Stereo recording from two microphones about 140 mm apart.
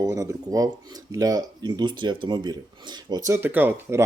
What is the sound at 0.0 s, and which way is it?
Speech, 20° right (ahead or behind).